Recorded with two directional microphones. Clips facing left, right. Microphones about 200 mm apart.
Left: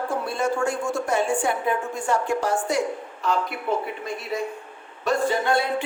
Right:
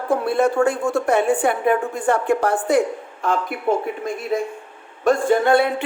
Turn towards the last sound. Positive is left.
turn(degrees=-60)  # may be behind; listen again after turning